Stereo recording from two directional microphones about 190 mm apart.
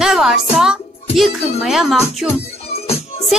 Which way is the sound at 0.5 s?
5° right (ahead or behind).